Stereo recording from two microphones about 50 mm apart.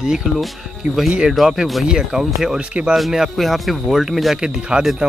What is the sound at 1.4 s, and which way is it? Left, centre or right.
Speech, centre.